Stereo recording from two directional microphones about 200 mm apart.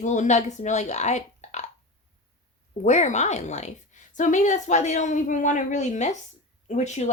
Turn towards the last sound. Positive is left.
turn(degrees=35)  # may be behind; listen again after turning